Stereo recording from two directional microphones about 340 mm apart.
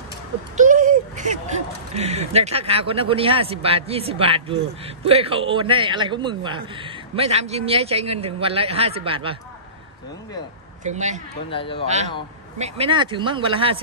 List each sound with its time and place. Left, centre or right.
0.6 s a sound: right
2.0 s a man's voice: centre
10.8 s a man's voice: right
11.5 s speech: centre
12.5 s a man's voice: centre